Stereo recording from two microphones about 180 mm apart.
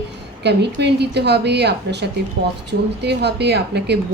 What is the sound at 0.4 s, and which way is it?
A woman's voice, 70° right (ahead or behind).